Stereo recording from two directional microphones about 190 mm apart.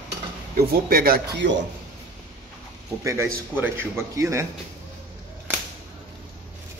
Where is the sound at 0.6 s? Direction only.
50° right (ahead or behind).